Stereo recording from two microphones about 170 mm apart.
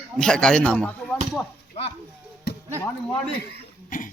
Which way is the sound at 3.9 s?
50° left (ahead or behind).